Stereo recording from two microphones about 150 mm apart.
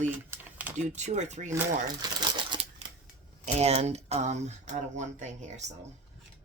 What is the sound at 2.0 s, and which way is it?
Speech, 25° right (ahead or behind).